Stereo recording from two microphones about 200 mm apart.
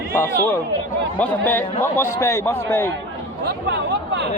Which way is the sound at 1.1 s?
5° left (ahead or behind).